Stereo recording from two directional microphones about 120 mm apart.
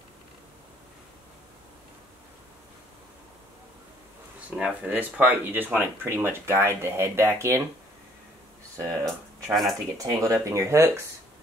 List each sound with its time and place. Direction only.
4.5 s speech: 10° right (ahead or behind)
9.5 s speech: centre (ahead or behind)
9.9 s speech: 30° right (ahead or behind)